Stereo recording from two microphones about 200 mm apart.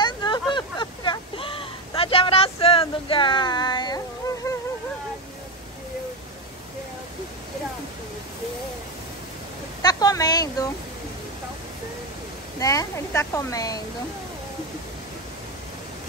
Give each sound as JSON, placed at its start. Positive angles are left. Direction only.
{"t": 0.0, "sound": "a sound", "side_deg": 20}
{"t": 9.8, "sound": "speech", "side_deg": 20}
{"t": 12.5, "sound": "speech", "side_deg": 15}